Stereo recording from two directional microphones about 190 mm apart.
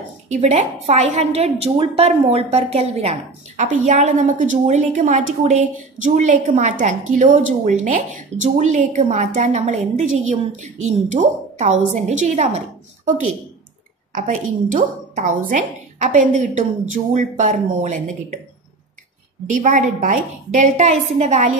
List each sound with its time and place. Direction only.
0.3 s a woman's voice: 35° right (ahead or behind)
14.1 s a woman's voice: 40° right (ahead or behind)
19.5 s a woman's voice: 40° right (ahead or behind)